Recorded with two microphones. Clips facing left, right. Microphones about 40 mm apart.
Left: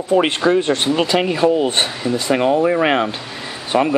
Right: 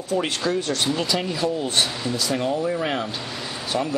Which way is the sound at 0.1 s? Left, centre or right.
Left.